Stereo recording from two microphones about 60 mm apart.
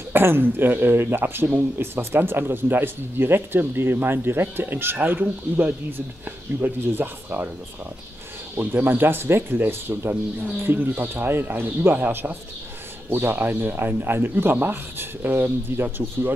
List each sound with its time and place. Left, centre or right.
0.1 s speech: right
8.5 s speech: right